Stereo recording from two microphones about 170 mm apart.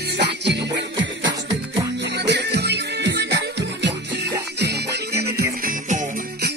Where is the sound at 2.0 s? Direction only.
80° right.